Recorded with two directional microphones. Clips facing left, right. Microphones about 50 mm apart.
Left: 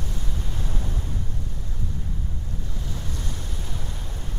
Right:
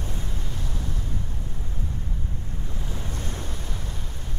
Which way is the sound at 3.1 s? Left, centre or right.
Right.